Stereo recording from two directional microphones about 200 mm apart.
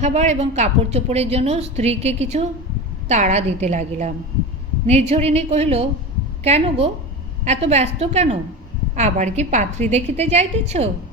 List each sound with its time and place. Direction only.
0.0 s a woman's voice: 35° right (ahead or behind)